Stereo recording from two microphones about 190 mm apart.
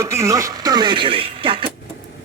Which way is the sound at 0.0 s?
15° right (ahead or behind).